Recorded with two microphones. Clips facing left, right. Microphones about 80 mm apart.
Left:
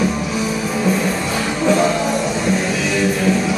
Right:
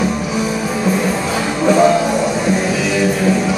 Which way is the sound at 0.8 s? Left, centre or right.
Centre.